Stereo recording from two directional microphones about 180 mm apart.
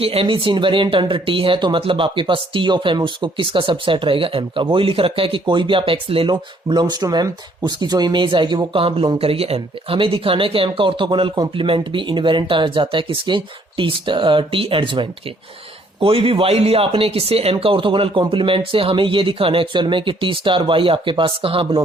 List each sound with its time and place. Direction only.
0.0 s speech: 30° right (ahead or behind)